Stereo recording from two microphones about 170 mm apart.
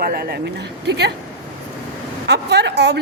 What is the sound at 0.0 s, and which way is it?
Speech, 65° right (ahead or behind).